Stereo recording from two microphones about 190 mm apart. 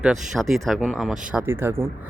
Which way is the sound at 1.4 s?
10° right (ahead or behind).